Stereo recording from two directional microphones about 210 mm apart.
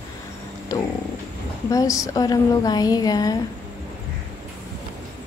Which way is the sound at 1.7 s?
15° left (ahead or behind).